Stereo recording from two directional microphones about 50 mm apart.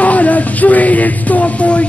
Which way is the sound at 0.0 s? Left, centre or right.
Left.